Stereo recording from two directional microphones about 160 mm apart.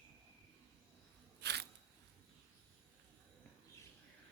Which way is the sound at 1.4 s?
90° right.